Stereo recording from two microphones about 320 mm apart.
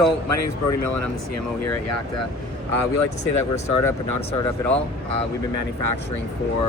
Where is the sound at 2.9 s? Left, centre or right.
Left.